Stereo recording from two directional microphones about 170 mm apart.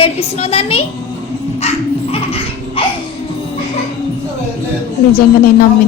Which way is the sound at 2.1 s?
35° left (ahead or behind).